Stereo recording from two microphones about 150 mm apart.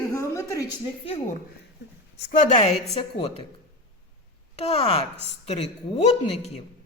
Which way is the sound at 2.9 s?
40° left (ahead or behind).